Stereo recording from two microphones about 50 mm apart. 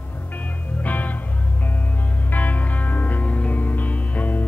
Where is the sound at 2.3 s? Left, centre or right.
Left.